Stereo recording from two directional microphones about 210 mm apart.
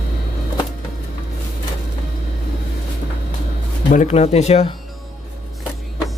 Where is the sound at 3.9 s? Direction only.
35° left (ahead or behind).